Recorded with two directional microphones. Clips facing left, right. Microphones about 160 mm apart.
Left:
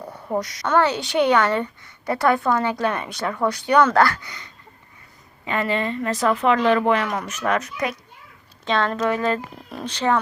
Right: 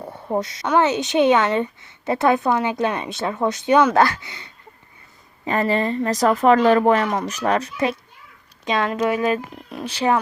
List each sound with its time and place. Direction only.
0.0 s a sound: 25° right (ahead or behind)
0.7 s a woman's voice: 20° right (ahead or behind)
5.5 s speech: 40° right (ahead or behind)
8.6 s speech: 15° right (ahead or behind)